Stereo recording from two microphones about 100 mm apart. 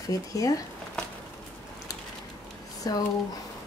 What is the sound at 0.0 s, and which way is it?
Speech, 35° left (ahead or behind).